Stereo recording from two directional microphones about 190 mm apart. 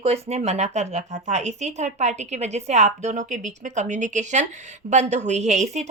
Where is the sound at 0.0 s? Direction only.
35° right (ahead or behind).